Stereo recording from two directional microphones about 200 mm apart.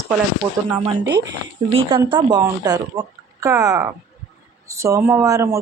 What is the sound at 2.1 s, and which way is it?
Speech, 20° right (ahead or behind).